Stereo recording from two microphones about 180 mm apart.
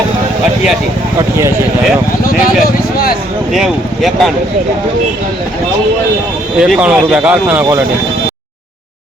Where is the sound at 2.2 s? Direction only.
55° left (ahead or behind).